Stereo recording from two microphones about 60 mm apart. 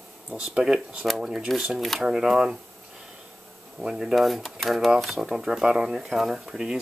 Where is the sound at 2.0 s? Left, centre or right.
Centre.